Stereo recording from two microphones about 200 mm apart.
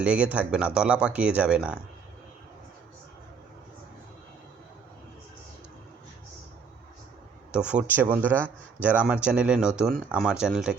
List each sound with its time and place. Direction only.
0.0 s speech: 5° right (ahead or behind)
7.5 s speech: 5° right (ahead or behind)